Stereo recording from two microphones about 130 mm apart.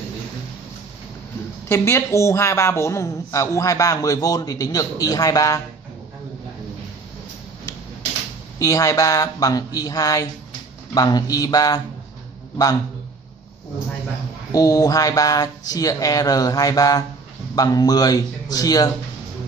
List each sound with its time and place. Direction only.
1.7 s speech: 20° left (ahead or behind)
8.5 s speech: 25° left (ahead or behind)
14.5 s speech: 30° left (ahead or behind)